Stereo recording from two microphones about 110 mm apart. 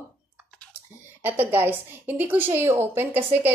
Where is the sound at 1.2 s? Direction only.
15° right (ahead or behind).